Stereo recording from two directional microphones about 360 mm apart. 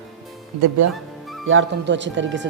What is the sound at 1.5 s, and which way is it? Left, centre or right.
Speech, right.